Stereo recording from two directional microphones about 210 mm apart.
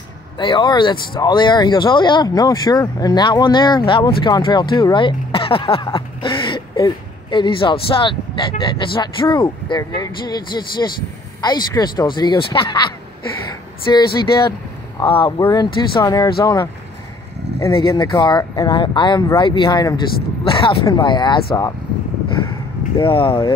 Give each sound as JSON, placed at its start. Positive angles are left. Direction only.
{"t": 0.4, "sound": "speech", "side_deg": 20}
{"t": 17.7, "sound": "speech", "side_deg": 20}
{"t": 22.9, "sound": "speech", "side_deg": 25}